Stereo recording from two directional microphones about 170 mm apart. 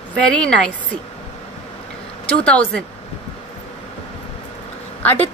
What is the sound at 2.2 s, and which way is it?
Speech, 5° left (ahead or behind).